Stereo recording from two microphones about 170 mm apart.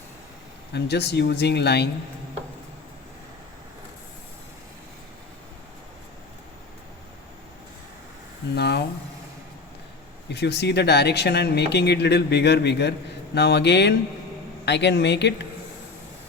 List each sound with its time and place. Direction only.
0.7 s speech: 75° left (ahead or behind)
8.5 s speech: 75° left (ahead or behind)
10.2 s speech: 85° left